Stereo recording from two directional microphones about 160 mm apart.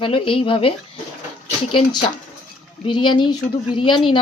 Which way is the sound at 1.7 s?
30° left (ahead or behind).